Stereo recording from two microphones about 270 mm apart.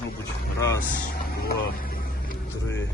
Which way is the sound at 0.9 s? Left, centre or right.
Left.